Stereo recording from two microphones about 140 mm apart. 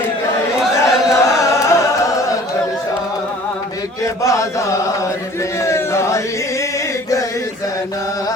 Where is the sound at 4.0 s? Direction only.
20° left (ahead or behind).